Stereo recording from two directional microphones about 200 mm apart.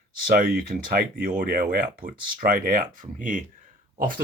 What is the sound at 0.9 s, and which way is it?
Speech, 40° right (ahead or behind).